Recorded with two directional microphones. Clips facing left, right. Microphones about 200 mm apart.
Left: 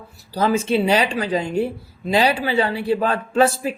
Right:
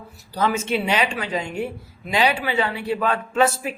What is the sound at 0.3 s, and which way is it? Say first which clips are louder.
A woman's voice: left 4 dB; 30° left (ahead or behind).